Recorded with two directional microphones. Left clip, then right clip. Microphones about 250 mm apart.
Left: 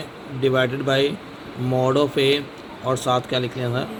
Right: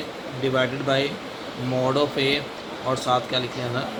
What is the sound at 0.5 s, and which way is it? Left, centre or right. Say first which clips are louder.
Speech: left 1 dB; left.